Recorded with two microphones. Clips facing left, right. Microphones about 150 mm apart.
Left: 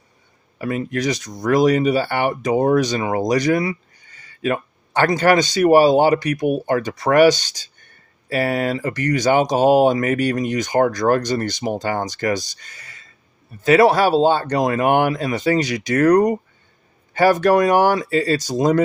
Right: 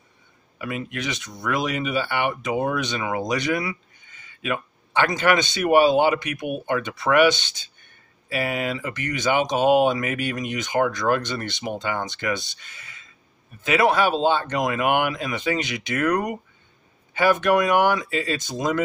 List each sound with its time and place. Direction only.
0.6 s speech: 35° left (ahead or behind)